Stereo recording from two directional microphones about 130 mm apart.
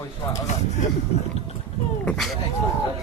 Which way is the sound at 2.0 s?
5° left (ahead or behind).